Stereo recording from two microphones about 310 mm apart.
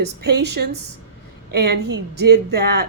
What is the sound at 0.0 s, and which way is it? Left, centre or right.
Speech, right.